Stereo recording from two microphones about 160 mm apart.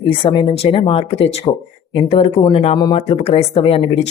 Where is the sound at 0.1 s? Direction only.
30° left (ahead or behind).